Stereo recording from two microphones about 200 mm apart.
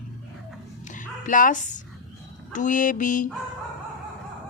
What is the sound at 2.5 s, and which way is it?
Mantra, 40° left (ahead or behind).